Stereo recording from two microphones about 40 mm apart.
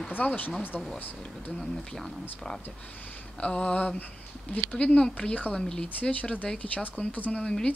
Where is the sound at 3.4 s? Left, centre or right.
Left.